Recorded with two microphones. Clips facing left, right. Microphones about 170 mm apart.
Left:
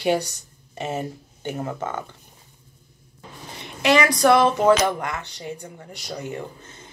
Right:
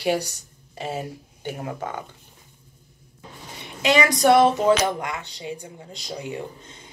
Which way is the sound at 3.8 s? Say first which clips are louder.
Left 1 dB; 20° right (ahead or behind).